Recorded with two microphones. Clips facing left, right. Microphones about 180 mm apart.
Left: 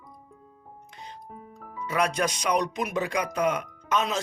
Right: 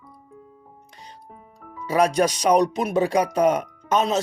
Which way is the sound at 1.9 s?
35° right (ahead or behind).